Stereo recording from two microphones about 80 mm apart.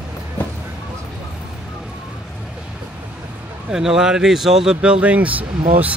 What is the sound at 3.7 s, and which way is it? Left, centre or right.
Speech, centre.